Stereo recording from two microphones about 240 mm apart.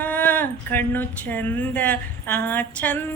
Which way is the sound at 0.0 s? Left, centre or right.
Centre.